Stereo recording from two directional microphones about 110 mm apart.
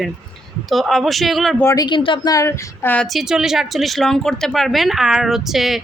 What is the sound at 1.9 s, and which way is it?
A woman's voice, 50° left (ahead or behind).